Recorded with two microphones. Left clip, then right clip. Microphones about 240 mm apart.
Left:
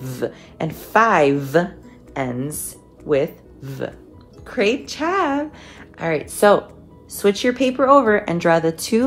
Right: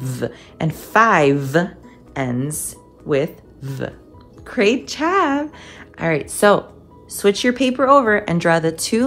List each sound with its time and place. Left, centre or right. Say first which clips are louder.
0.2 s a woman's voice: even; right